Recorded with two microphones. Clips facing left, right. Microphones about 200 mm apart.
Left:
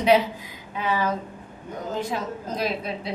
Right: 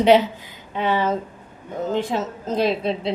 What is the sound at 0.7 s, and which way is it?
A woman's voice, 30° right (ahead or behind).